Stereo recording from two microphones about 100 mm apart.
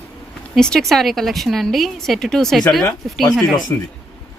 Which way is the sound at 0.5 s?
5° left (ahead or behind).